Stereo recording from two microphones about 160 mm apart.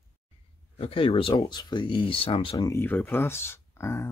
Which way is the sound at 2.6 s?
15° left (ahead or behind).